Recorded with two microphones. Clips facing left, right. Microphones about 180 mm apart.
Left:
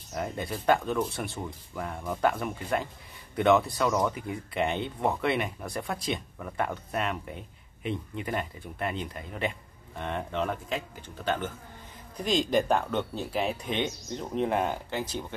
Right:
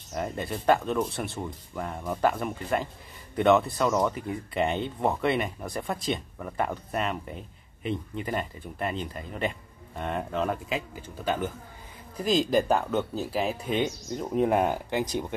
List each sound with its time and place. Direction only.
0.1 s speech: centre (ahead or behind)